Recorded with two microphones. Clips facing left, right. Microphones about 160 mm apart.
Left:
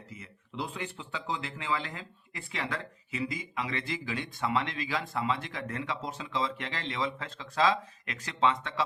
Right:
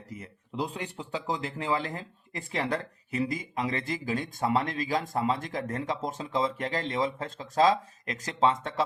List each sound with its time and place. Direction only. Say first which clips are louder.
0.1 s speech: right 6 dB; 40° right (ahead or behind)